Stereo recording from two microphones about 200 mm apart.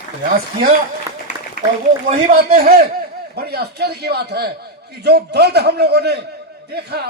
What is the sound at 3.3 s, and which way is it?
A man's voice, 50° right (ahead or behind).